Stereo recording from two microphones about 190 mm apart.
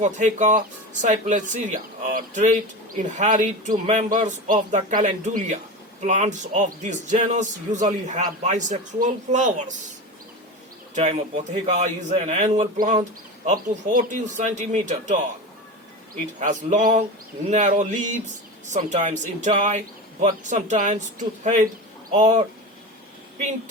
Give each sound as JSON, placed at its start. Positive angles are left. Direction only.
{"t": 0.0, "sound": "speech", "side_deg": -40}
{"t": 10.9, "sound": "speech", "side_deg": -35}
{"t": 16.4, "sound": "speech", "side_deg": -40}